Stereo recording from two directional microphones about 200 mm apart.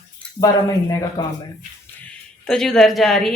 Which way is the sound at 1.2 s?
20° left (ahead or behind).